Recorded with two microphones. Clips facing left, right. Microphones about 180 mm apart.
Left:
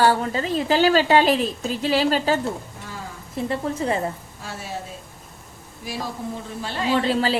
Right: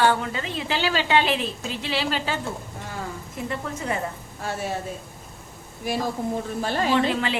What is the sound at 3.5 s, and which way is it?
Speech, 30° left (ahead or behind).